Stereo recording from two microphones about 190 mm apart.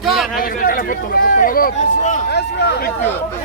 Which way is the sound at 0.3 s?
45° left (ahead or behind).